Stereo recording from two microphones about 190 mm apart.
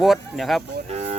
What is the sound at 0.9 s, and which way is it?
Vehicle, 35° right (ahead or behind).